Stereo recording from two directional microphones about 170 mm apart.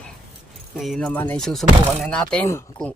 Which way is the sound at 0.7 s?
Centre (ahead or behind).